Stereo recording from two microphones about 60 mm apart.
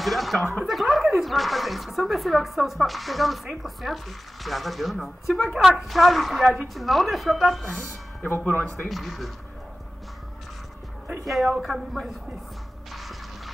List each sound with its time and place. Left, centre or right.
0.0 s speech: centre
8.3 s speech: left
8.7 s speech: centre
11.2 s speech: centre